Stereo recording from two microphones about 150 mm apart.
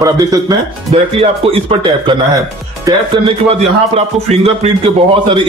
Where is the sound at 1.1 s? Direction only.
35° right (ahead or behind).